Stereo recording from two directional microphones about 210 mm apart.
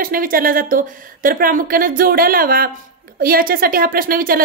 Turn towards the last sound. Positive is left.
turn(degrees=-45)  # may be behind; listen again after turning